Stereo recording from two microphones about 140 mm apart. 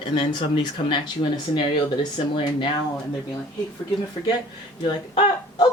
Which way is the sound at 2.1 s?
40° left (ahead or behind).